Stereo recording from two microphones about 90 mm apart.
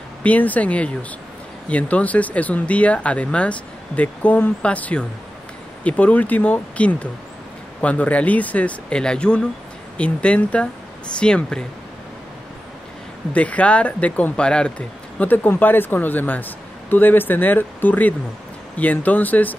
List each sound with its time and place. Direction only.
0.2 s speech: 15° left (ahead or behind)
13.3 s speech: 15° left (ahead or behind)